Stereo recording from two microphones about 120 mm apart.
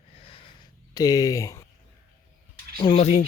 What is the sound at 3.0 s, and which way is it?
Speech, 75° left (ahead or behind).